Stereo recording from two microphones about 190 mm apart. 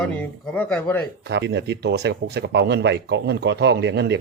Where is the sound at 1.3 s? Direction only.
65° right (ahead or behind).